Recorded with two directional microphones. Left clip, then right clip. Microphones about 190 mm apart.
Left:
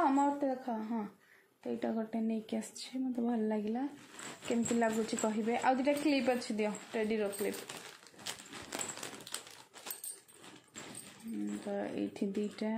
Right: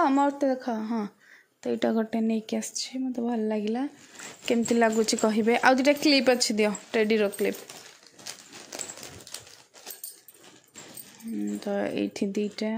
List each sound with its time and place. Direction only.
0.0 s a woman's voice: 60° right (ahead or behind); by 3.8 s 40° right (ahead or behind)
4.5 s a woman's voice: 50° right (ahead or behind)
8.7 s a sound: 10° left (ahead or behind)
11.6 s a woman's voice: 55° right (ahead or behind)